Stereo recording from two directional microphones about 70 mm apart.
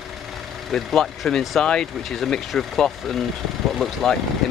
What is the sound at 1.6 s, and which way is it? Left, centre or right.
Speech, centre.